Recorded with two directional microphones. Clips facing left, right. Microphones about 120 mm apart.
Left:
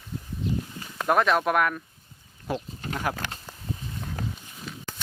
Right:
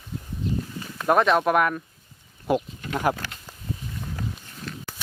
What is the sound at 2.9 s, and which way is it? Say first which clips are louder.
Speech: right 6 dB; 40° right (ahead or behind).